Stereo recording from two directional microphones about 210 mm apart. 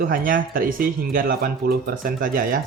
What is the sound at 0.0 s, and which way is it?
Speech, 40° right (ahead or behind).